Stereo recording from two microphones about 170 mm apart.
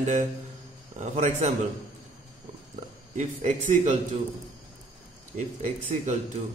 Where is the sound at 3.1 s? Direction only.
45° right (ahead or behind).